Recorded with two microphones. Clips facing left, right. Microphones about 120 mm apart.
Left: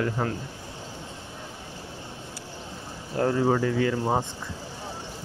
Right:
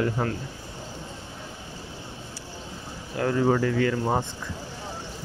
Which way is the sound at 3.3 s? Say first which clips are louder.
Right 3 dB; 10° left (ahead or behind).